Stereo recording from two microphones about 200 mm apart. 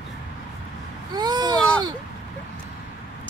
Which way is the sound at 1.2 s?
20° right (ahead or behind).